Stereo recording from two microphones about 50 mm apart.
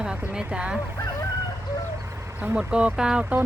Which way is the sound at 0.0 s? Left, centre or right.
Centre.